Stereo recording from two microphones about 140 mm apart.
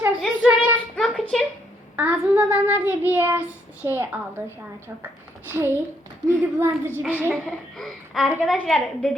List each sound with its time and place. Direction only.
0.2 s child singing: 10° right (ahead or behind)
0.9 s a sound: 5° left (ahead or behind)
2.0 s child singing: 15° right (ahead or behind)
5.5 s child singing: 15° right (ahead or behind)
7.4 s speech: centre (ahead or behind)